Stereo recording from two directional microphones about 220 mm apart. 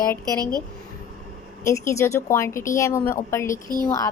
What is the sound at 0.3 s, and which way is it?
Speech, 15° right (ahead or behind).